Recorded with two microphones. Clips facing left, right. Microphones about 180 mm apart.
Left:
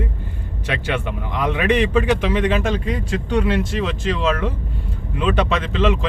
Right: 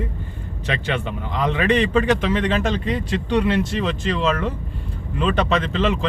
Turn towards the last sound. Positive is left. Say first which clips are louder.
# left 1 dB
turn(degrees=0)  # may be behind; listen again after turning